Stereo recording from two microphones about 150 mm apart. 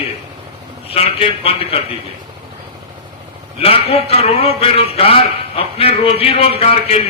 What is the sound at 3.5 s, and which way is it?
A man's voice, 40° left (ahead or behind).